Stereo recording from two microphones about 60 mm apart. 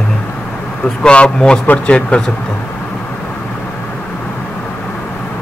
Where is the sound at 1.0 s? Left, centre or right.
Centre.